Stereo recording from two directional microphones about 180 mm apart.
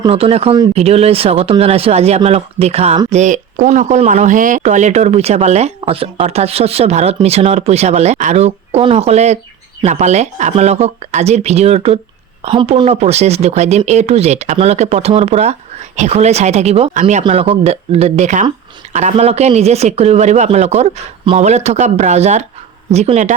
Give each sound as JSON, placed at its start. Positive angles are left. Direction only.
{"t": 0.0, "sound": "speech", "side_deg": -30}
{"t": 17.2, "sound": "speech", "side_deg": -30}